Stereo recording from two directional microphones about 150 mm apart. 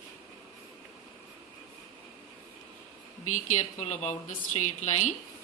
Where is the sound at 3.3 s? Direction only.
50° left (ahead or behind).